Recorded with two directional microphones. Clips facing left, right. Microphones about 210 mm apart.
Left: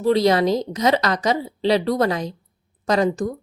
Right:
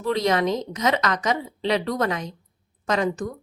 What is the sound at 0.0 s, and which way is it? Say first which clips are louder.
Speech: left 5 dB; 35° left (ahead or behind).